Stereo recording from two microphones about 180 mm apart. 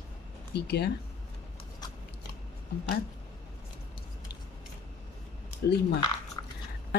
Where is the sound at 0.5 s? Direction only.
65° left (ahead or behind).